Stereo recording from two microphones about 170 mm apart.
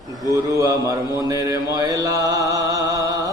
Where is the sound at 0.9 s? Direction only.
20° right (ahead or behind).